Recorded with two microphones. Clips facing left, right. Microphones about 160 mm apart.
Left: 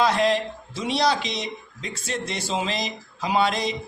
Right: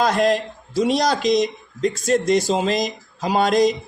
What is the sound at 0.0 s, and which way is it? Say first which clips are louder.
Speech: right 3 dB; 45° right (ahead or behind).